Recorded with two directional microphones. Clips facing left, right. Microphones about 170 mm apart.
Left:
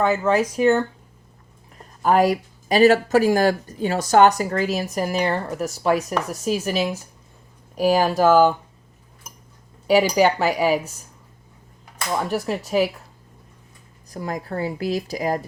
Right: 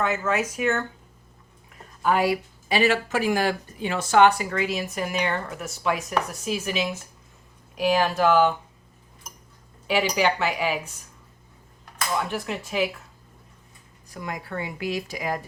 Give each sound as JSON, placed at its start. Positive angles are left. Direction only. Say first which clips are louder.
{"t": 0.0, "sound": "speech", "louder": "left 6 dB", "side_deg": 35}
{"t": 2.0, "sound": "speech", "louder": "left 5 dB", "side_deg": 40}
{"t": 9.8, "sound": "speech", "louder": "left 6 dB", "side_deg": 40}
{"t": 12.3, "sound": "speech", "louder": "left 7 dB", "side_deg": 40}
{"t": 14.1, "sound": "speech", "louder": "left 5 dB", "side_deg": 35}